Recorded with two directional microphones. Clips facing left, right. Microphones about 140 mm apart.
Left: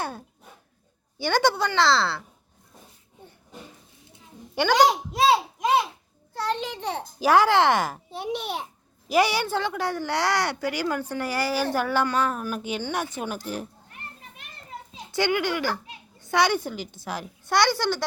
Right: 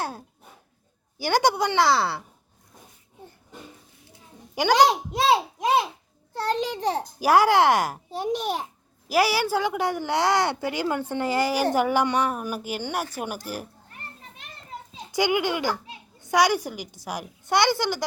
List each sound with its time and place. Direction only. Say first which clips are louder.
1.2 s speech: right 1 dB; 15° right (ahead or behind)
4.6 s speech: even; 10° right (ahead or behind)
6.4 s a child's voice: right 3 dB; 35° right (ahead or behind)
7.2 s speech: even; 10° right (ahead or behind)
8.1 s a child's voice: right 6 dB; 40° right (ahead or behind)
9.0 s speech: even; 5° right (ahead or behind)
15.1 s speech: right 1 dB; 15° right (ahead or behind)